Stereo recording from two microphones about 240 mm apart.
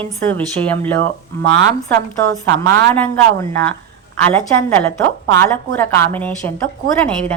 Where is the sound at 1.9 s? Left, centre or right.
Right.